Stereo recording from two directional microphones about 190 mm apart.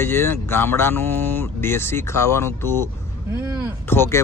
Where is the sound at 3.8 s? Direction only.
10° left (ahead or behind).